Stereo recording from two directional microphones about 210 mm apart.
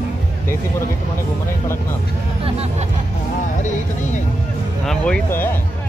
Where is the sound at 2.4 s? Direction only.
30° right (ahead or behind).